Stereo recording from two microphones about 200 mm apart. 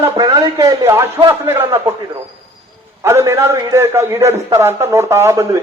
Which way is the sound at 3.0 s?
15° right (ahead or behind).